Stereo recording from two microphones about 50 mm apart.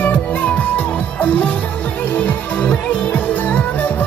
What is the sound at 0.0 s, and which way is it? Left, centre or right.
Music, left.